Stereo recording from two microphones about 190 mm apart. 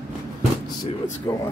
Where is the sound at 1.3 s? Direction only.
15° left (ahead or behind).